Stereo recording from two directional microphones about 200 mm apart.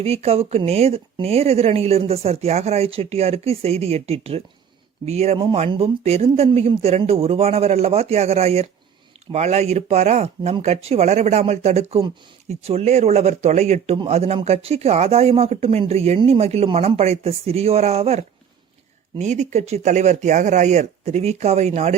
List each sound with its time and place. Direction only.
0.0 s speech: 30° right (ahead or behind)